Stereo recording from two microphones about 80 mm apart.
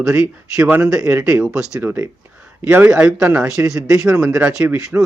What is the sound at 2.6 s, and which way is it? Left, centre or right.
Speech, right.